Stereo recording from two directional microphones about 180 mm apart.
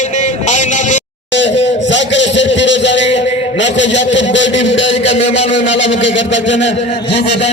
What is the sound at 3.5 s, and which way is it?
A man's voice, 85° left.